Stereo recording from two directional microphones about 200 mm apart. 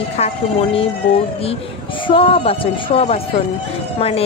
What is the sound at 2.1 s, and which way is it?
Speech, 25° left (ahead or behind).